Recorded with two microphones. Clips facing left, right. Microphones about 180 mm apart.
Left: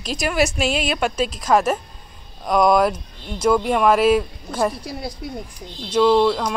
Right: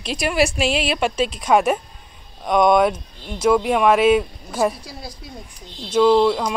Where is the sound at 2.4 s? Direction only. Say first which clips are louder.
Right 1 dB; centre (ahead or behind).